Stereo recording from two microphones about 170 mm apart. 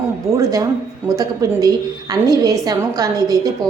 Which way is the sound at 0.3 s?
20° right (ahead or behind).